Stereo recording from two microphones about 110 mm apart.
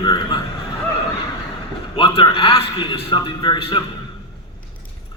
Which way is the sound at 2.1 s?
60° left (ahead or behind).